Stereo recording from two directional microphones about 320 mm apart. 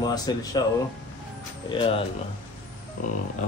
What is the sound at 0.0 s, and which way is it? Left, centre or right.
Speech, centre.